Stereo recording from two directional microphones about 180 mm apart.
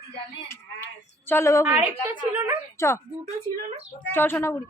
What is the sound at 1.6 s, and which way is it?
Speech, 10° right (ahead or behind).